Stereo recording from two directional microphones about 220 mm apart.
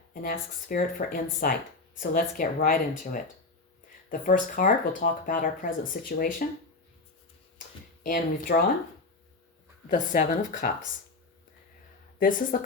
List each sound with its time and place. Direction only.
0.1 s speech: 40° left (ahead or behind)
8.0 s speech: 40° left (ahead or behind)
9.9 s speech: 35° left (ahead or behind)
12.5 s speech: 40° left (ahead or behind)